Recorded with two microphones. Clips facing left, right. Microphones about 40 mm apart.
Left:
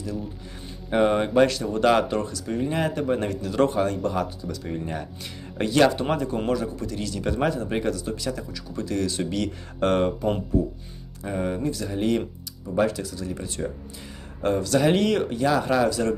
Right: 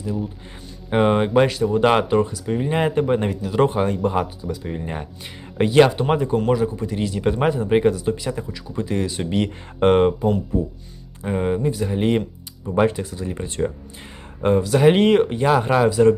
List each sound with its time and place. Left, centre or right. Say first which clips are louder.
0.9 s a man's voice: right 3 dB; right
1.8 s a man's voice: right 2 dB; right
3.4 s a man's voice: right 1 dB; centre; by 13.7 s right
14.4 s speech: right 5 dB; centre; by 15.9 s right
15.9 s a man's voice: right 9 dB; right